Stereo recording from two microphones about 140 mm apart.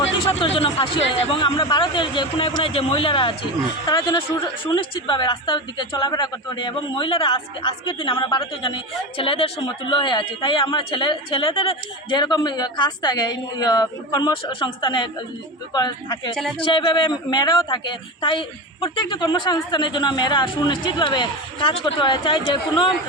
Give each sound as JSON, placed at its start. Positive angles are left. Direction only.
{"t": 0.3, "sound": "a woman's voice", "side_deg": 45}
{"t": 3.8, "sound": "a woman's voice", "side_deg": 25}